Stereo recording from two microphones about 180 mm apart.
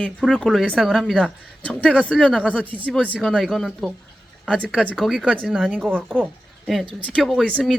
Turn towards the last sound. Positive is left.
turn(degrees=5)  # may be behind; listen again after turning